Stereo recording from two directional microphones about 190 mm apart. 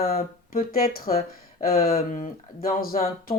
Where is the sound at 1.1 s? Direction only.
35° left (ahead or behind).